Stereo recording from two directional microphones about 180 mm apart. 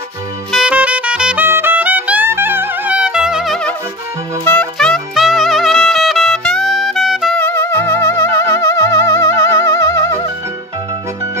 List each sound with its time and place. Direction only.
0.5 s music: 5° right (ahead or behind)
7.4 s music: 15° left (ahead or behind)